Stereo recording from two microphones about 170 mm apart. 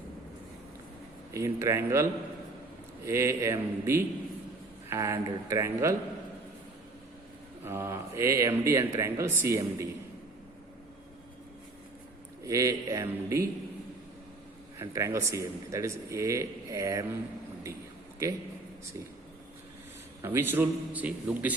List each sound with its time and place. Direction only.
1.3 s speech: 15° right (ahead or behind)
7.6 s speech: 15° right (ahead or behind)
12.4 s speech: 20° right (ahead or behind)
14.8 s speech: 20° right (ahead or behind)
20.2 s speech: 15° right (ahead or behind)